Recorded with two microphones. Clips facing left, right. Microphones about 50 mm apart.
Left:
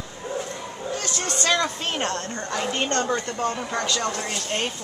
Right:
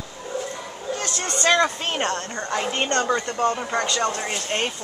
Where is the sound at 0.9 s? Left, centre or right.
Centre.